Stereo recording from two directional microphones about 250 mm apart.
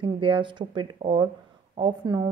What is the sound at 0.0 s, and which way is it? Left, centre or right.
A woman's voice, right.